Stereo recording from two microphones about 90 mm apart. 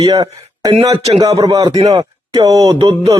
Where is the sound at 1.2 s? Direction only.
40° right (ahead or behind).